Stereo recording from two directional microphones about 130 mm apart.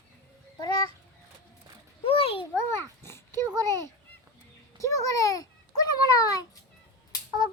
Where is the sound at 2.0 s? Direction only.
45° left (ahead or behind).